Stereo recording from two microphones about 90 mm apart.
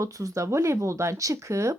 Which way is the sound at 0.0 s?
40° right (ahead or behind).